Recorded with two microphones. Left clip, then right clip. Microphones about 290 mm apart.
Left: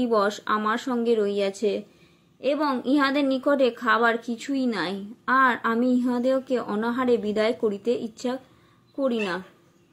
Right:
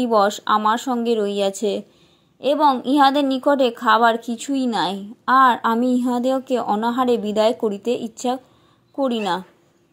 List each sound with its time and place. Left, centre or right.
0.0 s a woman's voice: centre